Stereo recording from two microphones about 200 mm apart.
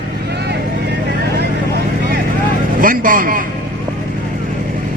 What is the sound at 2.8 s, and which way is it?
Speech, 45° right (ahead or behind).